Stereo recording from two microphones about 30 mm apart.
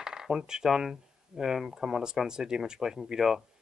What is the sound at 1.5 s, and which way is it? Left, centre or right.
Speech, centre.